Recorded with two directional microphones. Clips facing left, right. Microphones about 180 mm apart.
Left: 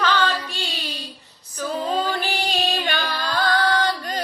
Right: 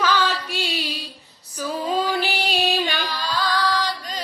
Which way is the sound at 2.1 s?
10° right (ahead or behind).